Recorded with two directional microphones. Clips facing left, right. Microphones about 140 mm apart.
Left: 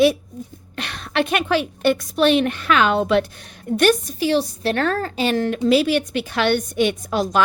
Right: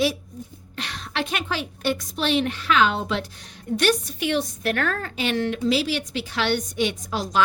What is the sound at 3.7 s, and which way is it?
Speech, 50° left (ahead or behind).